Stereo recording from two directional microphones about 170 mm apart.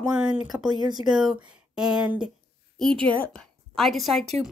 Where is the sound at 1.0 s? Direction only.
5° right (ahead or behind).